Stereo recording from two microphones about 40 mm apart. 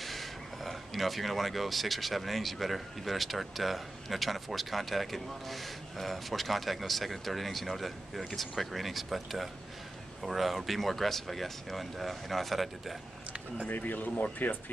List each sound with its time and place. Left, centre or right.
0.0 s speech: centre
13.7 s speech: left